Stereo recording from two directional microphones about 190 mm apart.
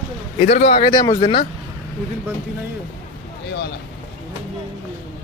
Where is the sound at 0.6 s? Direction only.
35° left (ahead or behind).